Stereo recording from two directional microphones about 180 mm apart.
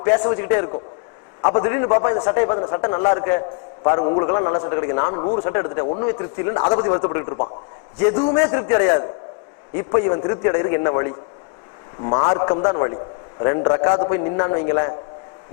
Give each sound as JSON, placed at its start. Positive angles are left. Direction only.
{"t": 0.0, "sound": "a man's voice", "side_deg": 20}
{"t": 3.8, "sound": "a man's voice", "side_deg": 30}
{"t": 8.4, "sound": "a man's voice", "side_deg": 25}
{"t": 9.9, "sound": "a man's voice", "side_deg": 25}